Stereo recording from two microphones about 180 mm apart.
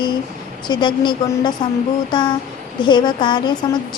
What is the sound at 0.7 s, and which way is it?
A woman's voice, 25° left (ahead or behind).